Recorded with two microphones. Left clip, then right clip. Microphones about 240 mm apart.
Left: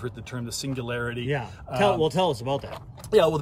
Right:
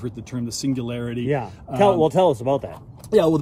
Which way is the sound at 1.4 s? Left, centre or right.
Centre.